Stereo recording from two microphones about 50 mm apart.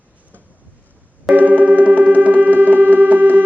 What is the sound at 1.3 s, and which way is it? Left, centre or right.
Music, right.